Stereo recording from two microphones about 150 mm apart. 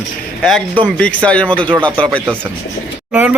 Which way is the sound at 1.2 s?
10° left (ahead or behind).